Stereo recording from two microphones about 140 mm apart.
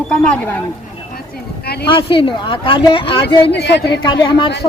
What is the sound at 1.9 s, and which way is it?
Speech, 35° left (ahead or behind).